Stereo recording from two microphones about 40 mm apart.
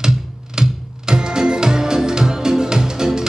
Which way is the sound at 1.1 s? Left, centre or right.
Centre.